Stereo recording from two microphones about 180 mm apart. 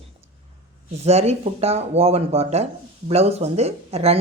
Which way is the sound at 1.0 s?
35° right (ahead or behind).